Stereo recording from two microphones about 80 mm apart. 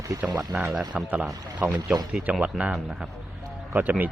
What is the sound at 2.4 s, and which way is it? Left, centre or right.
Speech, centre.